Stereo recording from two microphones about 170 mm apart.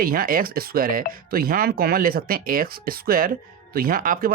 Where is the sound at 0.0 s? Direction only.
55° right (ahead or behind).